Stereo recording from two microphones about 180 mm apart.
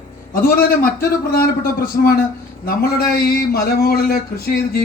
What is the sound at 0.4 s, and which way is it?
Speech, 55° left (ahead or behind).